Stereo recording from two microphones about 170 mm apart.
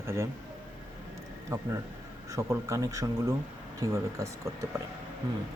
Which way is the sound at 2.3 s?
20° right (ahead or behind).